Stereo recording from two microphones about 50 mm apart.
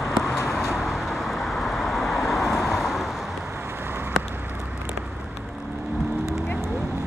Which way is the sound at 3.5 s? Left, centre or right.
Right.